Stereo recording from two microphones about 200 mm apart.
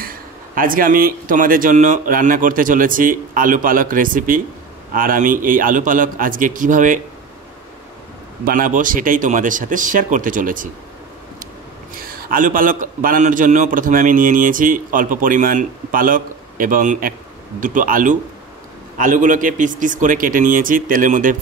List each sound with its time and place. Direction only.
0.0 s a man's voice: 45° right (ahead or behind)
8.5 s a man's voice: 45° right (ahead or behind)
12.0 s a man's voice: 45° right (ahead or behind)